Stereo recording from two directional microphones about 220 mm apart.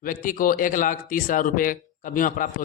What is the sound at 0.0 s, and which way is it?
A man's voice, 40° left (ahead or behind).